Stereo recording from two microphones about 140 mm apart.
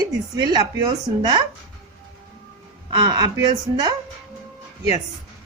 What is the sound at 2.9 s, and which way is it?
Speech, 30° right (ahead or behind).